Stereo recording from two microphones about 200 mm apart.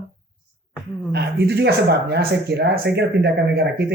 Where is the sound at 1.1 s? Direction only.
55° right (ahead or behind).